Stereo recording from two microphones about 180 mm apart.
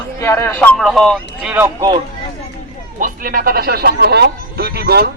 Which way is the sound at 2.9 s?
50° right (ahead or behind).